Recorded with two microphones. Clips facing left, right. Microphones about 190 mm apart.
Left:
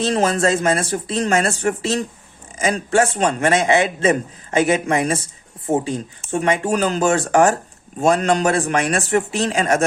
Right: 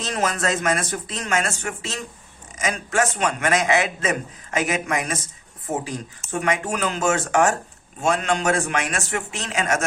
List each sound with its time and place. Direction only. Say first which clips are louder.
0.0 s speech: left 7 dB; 30° left (ahead or behind)